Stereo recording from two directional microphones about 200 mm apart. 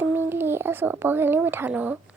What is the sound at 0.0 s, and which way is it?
A child's voice, 10° right (ahead or behind).